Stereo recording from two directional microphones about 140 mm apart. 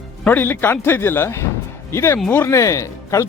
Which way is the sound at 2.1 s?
5° left (ahead or behind).